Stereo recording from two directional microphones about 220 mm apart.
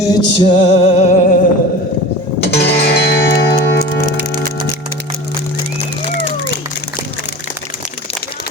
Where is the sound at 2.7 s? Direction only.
50° left (ahead or behind).